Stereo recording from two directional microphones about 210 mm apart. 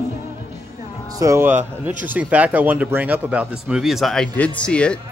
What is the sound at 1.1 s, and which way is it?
Speech, 15° right (ahead or behind).